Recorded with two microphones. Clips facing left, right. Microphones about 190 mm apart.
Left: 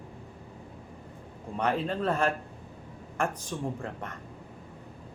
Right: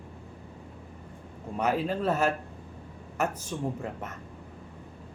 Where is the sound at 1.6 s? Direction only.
5° right (ahead or behind).